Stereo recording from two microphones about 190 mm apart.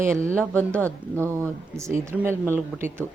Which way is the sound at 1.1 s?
15° right (ahead or behind).